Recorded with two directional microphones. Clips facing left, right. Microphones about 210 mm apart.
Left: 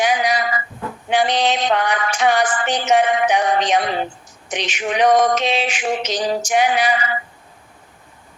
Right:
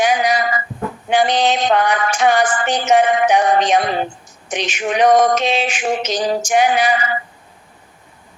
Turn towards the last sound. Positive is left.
turn(degrees=-45)  # may be behind; listen again after turning